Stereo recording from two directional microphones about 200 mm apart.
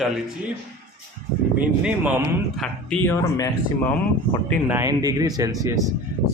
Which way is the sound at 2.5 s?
5° left (ahead or behind).